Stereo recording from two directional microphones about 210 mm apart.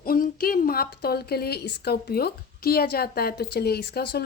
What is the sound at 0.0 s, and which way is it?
A woman's voice, 45° left (ahead or behind).